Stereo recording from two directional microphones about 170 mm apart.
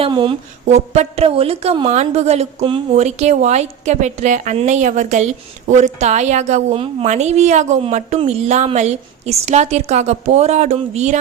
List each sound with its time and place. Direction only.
0.0 s mantra: 30° right (ahead or behind)
0.7 s a woman's voice: 40° right (ahead or behind)